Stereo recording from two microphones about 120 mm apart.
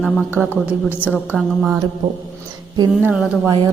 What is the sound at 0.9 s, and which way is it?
Speech, 15° left (ahead or behind).